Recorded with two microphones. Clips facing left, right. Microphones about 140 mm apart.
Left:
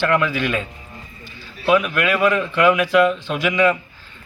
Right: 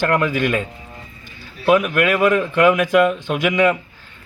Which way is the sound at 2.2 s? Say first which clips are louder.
Right 1 dB; 50° right (ahead or behind).